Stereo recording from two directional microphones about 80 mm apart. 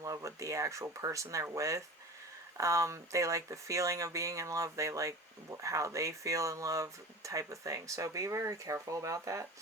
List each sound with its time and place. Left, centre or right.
0.0 s speech: right